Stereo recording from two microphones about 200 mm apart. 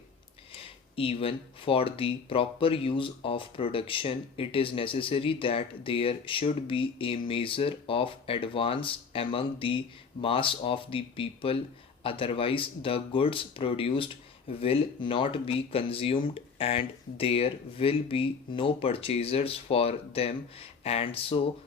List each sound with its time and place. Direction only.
0.5 s speech: 30° left (ahead or behind)